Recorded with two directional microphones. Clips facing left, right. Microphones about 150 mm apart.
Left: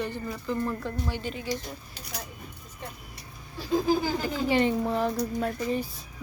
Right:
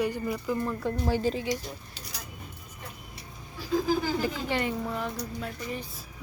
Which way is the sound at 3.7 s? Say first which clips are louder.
Left 2 dB; 20° left (ahead or behind).